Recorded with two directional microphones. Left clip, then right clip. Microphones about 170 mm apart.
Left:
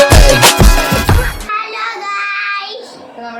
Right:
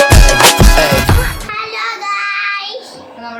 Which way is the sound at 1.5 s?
15° right (ahead or behind).